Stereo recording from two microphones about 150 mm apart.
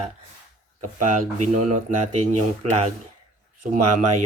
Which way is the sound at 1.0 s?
55° right (ahead or behind).